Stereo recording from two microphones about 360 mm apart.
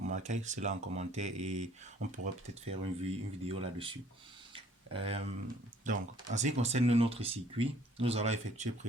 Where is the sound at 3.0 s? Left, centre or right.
Centre.